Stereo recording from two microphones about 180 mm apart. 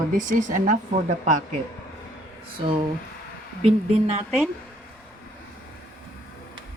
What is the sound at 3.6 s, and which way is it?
Speech, 35° right (ahead or behind).